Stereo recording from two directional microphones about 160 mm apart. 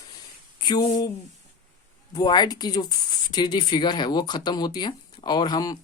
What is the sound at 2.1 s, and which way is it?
Speech, 25° left (ahead or behind).